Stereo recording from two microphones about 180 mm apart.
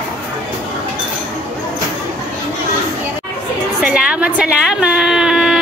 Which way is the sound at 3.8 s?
5° right (ahead or behind).